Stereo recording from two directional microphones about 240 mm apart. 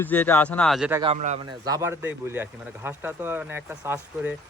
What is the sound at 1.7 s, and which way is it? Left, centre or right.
Speech, centre.